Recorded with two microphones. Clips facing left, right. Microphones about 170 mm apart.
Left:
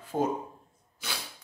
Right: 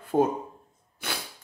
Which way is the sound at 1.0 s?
60° right (ahead or behind).